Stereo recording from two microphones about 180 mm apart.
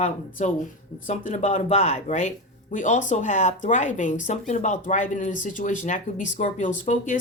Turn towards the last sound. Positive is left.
turn(degrees=45)  # may be behind; listen again after turning